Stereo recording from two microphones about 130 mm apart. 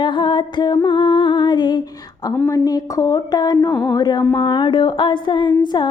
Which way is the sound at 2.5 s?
25° left (ahead or behind).